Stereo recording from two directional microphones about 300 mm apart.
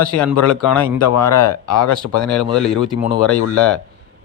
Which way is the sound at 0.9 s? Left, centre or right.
Left.